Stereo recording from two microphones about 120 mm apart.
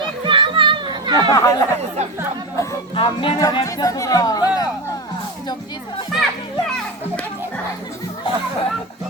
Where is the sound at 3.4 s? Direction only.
30° left (ahead or behind).